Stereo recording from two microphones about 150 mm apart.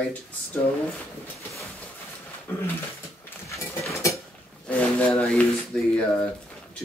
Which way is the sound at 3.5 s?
20° left (ahead or behind).